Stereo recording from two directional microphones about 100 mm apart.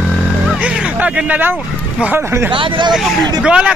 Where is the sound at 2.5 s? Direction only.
55° right (ahead or behind).